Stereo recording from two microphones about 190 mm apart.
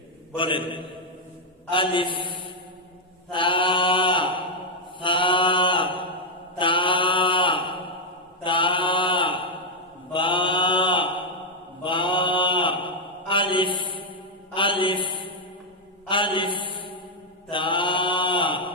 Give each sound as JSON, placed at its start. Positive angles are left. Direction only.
{"t": 0.3, "sound": "mantra", "side_deg": 25}